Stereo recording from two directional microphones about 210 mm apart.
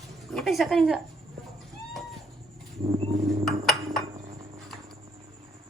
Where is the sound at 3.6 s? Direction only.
Centre (ahead or behind).